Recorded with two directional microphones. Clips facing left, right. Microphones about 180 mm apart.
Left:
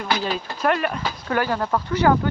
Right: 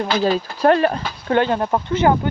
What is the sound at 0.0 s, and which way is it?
Speech, 35° right (ahead or behind).